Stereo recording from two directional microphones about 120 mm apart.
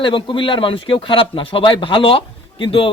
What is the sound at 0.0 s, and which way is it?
A man's voice, 45° left (ahead or behind).